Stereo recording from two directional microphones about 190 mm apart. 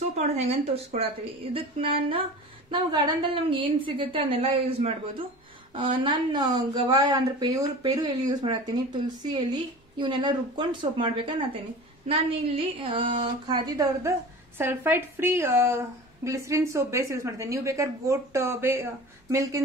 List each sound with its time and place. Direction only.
0.1 s a woman's voice: 30° right (ahead or behind); by 19.6 s 15° right (ahead or behind)